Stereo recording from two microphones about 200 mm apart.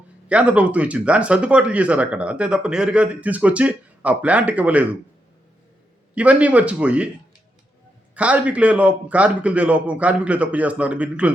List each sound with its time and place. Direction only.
0.3 s speech: 5° right (ahead or behind)
6.1 s speech: 5° right (ahead or behind)
8.1 s speech: 5° right (ahead or behind)